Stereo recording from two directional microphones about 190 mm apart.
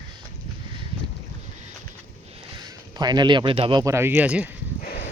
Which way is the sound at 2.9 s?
20° right (ahead or behind).